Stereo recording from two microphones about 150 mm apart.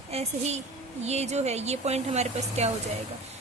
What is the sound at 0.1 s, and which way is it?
Speech, 45° right (ahead or behind).